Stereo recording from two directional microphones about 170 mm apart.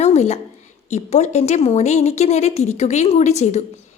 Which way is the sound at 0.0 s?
40° left (ahead or behind).